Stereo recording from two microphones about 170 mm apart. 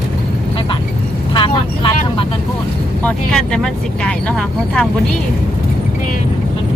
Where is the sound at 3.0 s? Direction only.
5° left (ahead or behind).